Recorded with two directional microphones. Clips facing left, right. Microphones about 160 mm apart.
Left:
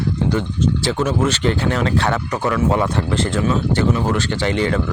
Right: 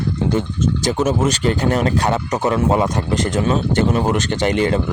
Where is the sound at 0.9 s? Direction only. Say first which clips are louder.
Right 4 dB; 20° right (ahead or behind).